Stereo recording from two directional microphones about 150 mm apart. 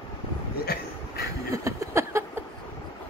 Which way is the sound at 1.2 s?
20° right (ahead or behind).